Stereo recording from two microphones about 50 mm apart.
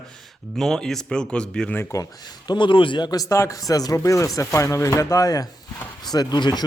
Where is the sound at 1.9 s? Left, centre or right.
Left.